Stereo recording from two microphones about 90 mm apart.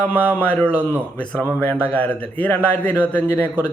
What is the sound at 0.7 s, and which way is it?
Speech, 25° right (ahead or behind).